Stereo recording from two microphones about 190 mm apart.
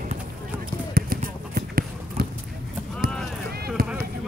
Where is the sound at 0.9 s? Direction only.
50° right (ahead or behind).